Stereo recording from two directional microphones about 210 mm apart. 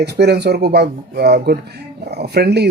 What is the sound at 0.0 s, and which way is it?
Speech, 50° right (ahead or behind).